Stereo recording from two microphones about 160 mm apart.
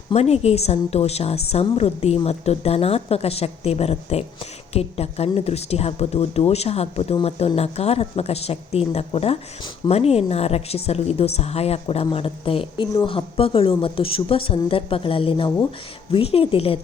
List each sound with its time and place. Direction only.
0.1 s speech: 40° left (ahead or behind)